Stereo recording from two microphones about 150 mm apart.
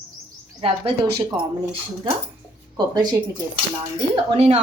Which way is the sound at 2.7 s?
30° right (ahead or behind).